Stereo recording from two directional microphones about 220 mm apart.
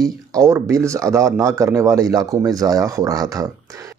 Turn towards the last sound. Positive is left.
turn(degrees=-15)  # may be behind; listen again after turning